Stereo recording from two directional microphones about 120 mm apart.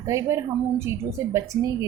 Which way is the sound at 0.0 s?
25° right (ahead or behind).